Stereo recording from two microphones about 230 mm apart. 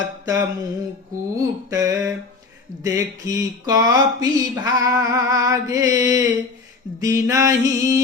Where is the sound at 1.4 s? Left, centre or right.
Centre.